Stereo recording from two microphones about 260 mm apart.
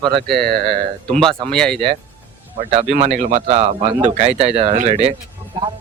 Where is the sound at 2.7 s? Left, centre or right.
Right.